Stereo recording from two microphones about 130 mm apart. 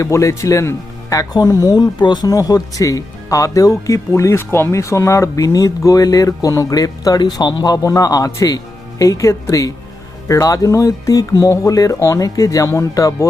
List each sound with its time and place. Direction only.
0.0 s speech: 25° left (ahead or behind)